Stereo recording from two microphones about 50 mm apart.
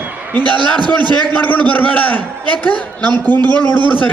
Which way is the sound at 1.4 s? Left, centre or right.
Left.